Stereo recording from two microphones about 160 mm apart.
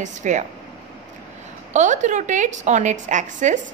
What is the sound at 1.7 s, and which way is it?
A woman's voice, 50° right (ahead or behind).